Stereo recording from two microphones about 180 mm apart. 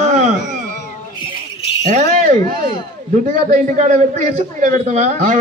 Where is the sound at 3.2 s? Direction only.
45° right (ahead or behind).